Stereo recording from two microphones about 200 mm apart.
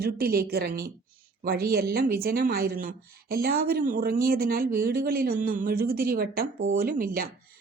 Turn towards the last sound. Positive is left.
turn(degrees=-45)  # may be behind; listen again after turning